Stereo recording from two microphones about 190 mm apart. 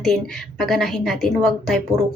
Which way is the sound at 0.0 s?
Centre (ahead or behind).